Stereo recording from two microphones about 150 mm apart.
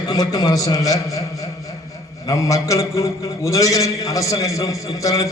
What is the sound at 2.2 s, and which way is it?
A man's voice, 20° left (ahead or behind).